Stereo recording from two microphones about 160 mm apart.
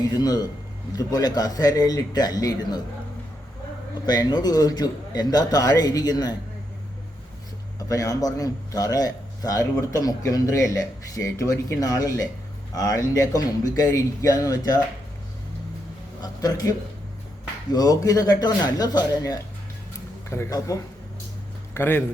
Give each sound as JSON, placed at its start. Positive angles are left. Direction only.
{"t": 0.0, "sound": "a man's voice", "side_deg": 25}
{"t": 4.0, "sound": "a man's voice", "side_deg": 25}
{"t": 7.8, "sound": "a man's voice", "side_deg": 20}
{"t": 16.2, "sound": "a man's voice", "side_deg": 25}